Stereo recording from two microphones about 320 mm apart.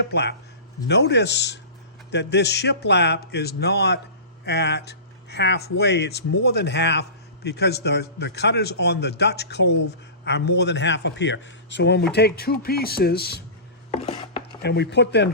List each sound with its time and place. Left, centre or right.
0.0 s speech: left
14.0 s chopping: centre
14.6 s speech: left